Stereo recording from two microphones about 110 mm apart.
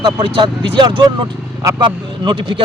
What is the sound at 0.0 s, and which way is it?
Speech, 50° right (ahead or behind).